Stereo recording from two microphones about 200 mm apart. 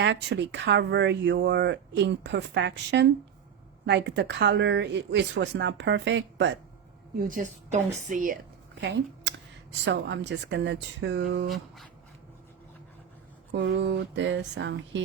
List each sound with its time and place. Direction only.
0.0 s speech: 60° right (ahead or behind)
7.2 s a woman's voice: 45° right (ahead or behind)
8.8 s speech: 60° right (ahead or behind)
13.5 s speech: 60° right (ahead or behind)